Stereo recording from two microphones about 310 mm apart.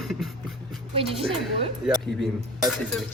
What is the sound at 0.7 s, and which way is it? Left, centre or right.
Speech, centre.